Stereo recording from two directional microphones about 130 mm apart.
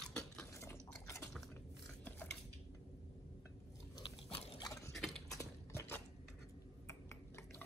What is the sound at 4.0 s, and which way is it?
Biting, 50° left (ahead or behind).